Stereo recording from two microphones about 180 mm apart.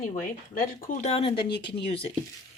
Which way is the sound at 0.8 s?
45° left (ahead or behind).